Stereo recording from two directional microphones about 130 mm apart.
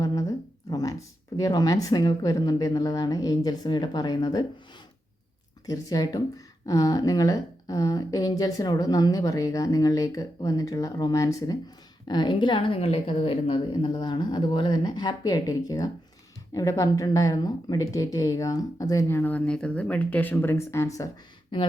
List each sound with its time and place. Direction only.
0.0 s speech: 30° left (ahead or behind)
5.6 s a woman's voice: 25° left (ahead or behind)
21.5 s a woman's voice: 40° left (ahead or behind)